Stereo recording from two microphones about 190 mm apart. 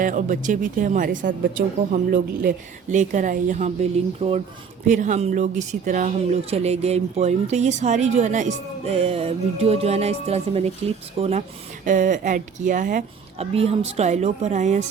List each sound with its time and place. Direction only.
0.0 s speech: 45° right (ahead or behind)